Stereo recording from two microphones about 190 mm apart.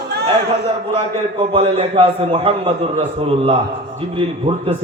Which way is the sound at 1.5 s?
30° right (ahead or behind).